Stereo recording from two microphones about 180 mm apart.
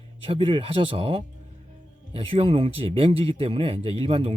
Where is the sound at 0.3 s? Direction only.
30° right (ahead or behind).